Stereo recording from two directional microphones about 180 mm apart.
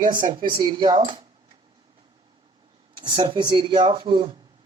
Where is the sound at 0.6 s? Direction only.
25° right (ahead or behind).